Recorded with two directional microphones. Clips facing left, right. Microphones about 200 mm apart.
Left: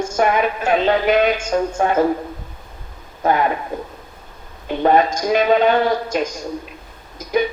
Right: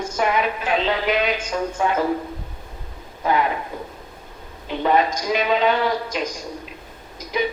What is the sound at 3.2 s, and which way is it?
Speech, 50° left (ahead or behind).